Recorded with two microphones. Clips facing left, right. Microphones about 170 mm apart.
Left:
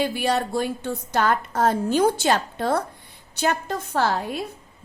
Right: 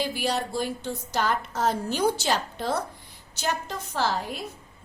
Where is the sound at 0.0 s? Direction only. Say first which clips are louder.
Left 5 dB; 55° left (ahead or behind).